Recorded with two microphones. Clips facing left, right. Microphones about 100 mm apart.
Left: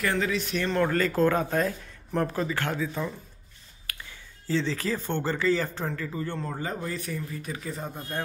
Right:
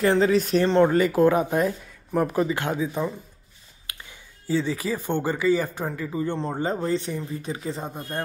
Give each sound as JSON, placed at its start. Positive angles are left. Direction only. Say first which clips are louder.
{"t": 0.0, "sound": "speech", "louder": "right 8 dB", "side_deg": -30}
{"t": 0.9, "sound": "speech", "louder": "right 5 dB", "side_deg": -15}